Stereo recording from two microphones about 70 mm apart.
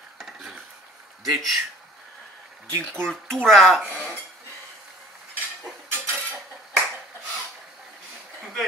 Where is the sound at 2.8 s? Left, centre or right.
Centre.